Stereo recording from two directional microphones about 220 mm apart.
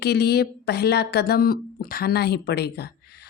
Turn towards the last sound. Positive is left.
turn(degrees=45)  # may be behind; listen again after turning